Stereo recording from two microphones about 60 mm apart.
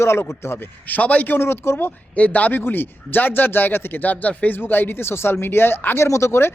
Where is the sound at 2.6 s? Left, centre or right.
Left.